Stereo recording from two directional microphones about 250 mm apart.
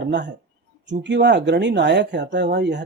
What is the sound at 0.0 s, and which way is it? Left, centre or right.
Speech, right.